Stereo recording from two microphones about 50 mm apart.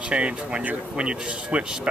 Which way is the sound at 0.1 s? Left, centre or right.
Right.